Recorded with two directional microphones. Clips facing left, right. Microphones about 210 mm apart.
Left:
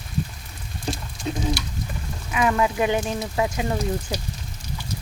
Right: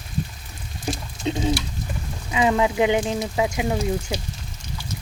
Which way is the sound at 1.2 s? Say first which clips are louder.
Right 3 dB; 25° right (ahead or behind).